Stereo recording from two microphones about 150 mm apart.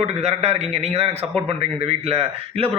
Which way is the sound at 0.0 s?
45° right (ahead or behind).